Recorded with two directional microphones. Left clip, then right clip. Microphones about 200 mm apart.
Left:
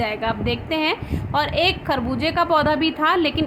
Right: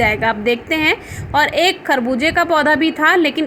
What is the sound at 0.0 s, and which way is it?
A woman's voice, 20° right (ahead or behind).